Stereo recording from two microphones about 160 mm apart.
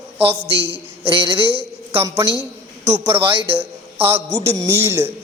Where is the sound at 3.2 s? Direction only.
35° right (ahead or behind).